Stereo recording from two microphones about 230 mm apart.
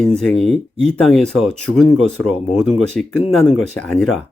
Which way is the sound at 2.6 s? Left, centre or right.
Centre.